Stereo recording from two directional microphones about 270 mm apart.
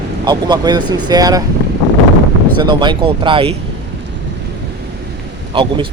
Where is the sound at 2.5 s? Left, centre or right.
Centre.